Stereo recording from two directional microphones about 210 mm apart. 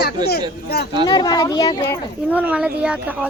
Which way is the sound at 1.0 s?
20° left (ahead or behind).